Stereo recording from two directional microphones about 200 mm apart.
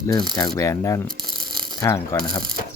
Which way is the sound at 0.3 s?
20° left (ahead or behind).